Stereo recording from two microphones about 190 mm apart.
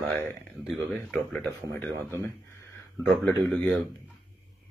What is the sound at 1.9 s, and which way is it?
Speech, 15° right (ahead or behind).